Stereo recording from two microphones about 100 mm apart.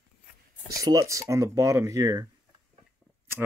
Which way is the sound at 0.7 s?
35° right (ahead or behind).